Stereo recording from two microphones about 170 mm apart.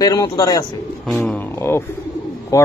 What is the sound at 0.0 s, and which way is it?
Speech, 20° left (ahead or behind).